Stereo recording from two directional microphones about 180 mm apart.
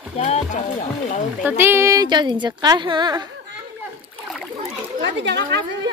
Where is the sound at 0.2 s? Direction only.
45° left (ahead or behind).